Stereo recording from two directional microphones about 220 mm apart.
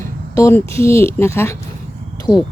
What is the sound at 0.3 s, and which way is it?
Speech, 15° left (ahead or behind).